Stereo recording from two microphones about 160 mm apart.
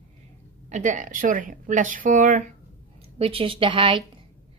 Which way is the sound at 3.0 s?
35° right (ahead or behind).